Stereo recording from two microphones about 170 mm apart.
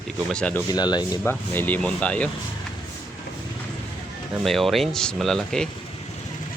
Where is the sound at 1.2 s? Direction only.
10° left (ahead or behind).